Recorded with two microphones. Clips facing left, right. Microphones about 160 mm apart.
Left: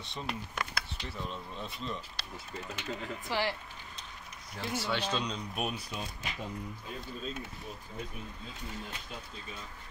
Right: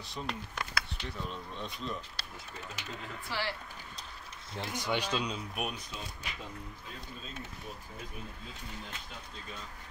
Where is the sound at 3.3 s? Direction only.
15° left (ahead or behind).